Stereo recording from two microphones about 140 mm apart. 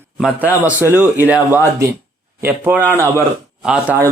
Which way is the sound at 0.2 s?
5° right (ahead or behind).